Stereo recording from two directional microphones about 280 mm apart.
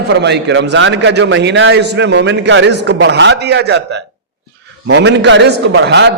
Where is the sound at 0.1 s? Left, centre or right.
Right.